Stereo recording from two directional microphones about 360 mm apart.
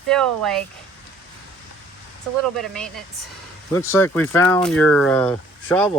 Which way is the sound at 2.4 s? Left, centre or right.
Centre.